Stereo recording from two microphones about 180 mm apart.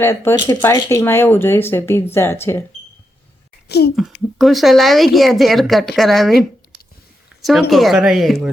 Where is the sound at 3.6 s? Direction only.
65° left (ahead or behind).